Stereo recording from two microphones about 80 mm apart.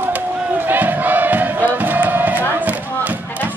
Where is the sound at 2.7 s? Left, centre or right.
Right.